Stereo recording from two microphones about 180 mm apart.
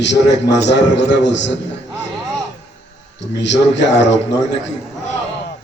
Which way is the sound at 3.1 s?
80° left.